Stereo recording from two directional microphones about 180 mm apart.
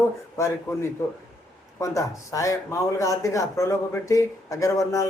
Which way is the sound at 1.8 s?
15° left (ahead or behind).